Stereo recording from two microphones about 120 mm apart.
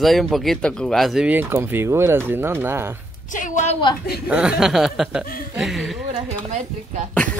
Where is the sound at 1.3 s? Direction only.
15° right (ahead or behind).